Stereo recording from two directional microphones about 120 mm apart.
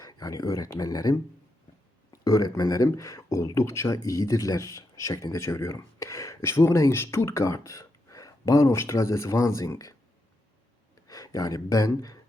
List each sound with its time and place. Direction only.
0.0 s speech: 30° left (ahead or behind)
11.1 s speech: 30° left (ahead or behind)